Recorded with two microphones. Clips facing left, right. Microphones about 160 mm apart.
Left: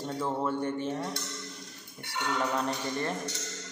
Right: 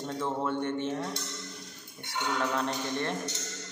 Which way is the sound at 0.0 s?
5° left (ahead or behind).